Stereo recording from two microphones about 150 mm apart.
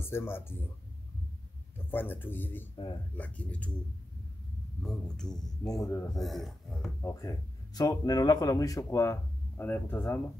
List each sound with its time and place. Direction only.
0.0 s speech: 15° left (ahead or behind)
1.9 s speech: 15° left (ahead or behind)
4.8 s speech: 5° left (ahead or behind)
5.6 s speech: 20° left (ahead or behind)
6.1 s speech: centre (ahead or behind)
7.0 s speech: 20° left (ahead or behind)